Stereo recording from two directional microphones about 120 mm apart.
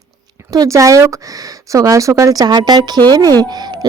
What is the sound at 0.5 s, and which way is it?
A woman's voice, 30° right (ahead or behind).